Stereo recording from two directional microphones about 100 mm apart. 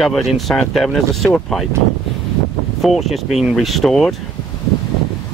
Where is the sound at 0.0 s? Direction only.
Centre (ahead or behind).